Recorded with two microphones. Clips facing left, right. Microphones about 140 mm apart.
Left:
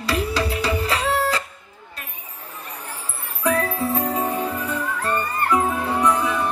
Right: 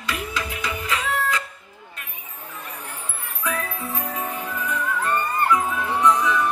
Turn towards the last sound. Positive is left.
turn(degrees=30)  # may be behind; listen again after turning